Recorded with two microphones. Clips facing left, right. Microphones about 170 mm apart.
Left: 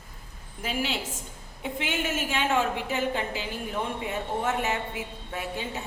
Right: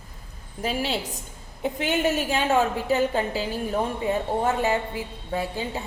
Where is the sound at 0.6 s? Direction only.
35° right (ahead or behind).